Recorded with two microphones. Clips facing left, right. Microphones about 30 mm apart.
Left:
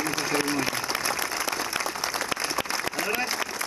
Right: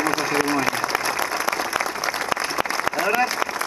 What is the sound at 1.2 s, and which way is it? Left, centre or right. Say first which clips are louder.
Applause: right 5 dB; right.